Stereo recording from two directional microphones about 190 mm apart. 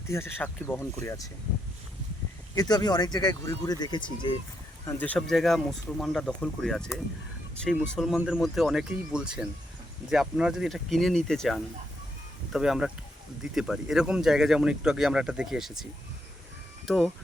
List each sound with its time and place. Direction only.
0.1 s speech: 10° left (ahead or behind)
2.6 s speech: 20° left (ahead or behind)
4.9 s speech: 10° left (ahead or behind)